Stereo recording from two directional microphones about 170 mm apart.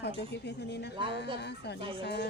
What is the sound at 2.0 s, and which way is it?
Speech, 80° left.